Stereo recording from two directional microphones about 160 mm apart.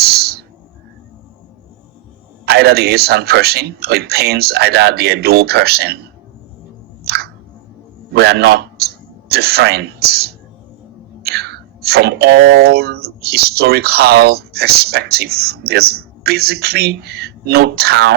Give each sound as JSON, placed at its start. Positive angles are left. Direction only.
{"t": 0.0, "sound": "a sound", "side_deg": -80}
{"t": 2.5, "sound": "speech", "side_deg": -90}
{"t": 7.0, "sound": "music", "side_deg": -80}
{"t": 8.1, "sound": "a man's voice", "side_deg": -90}